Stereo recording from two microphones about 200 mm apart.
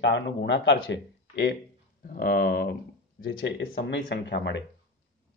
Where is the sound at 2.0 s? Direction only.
50° left (ahead or behind).